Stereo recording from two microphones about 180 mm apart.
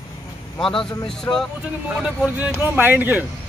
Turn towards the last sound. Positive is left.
turn(degrees=-10)  # may be behind; listen again after turning